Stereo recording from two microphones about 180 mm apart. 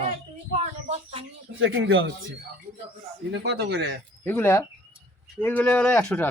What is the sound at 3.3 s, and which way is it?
Speech, 70° right (ahead or behind).